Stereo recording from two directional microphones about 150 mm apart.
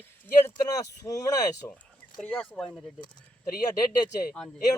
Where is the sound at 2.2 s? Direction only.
10° left (ahead or behind).